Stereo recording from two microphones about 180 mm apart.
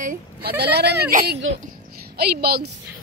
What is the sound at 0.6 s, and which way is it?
Speech, 65° right (ahead or behind).